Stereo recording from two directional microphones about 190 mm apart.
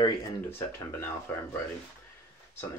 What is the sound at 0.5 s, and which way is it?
Speech, 15° left (ahead or behind).